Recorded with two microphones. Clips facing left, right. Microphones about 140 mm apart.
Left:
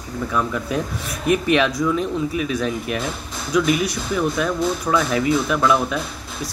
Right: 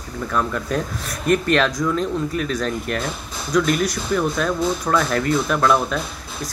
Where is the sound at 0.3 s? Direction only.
5° left (ahead or behind).